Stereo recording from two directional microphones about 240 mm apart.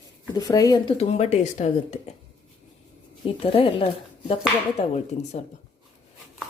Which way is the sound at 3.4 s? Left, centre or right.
Left.